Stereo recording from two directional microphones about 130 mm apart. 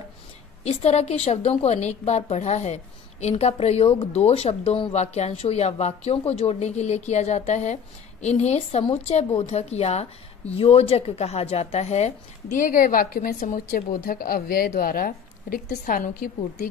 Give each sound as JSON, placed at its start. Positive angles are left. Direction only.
{"t": 0.7, "sound": "a woman's voice", "side_deg": 55}
{"t": 12.5, "sound": "a woman's voice", "side_deg": 90}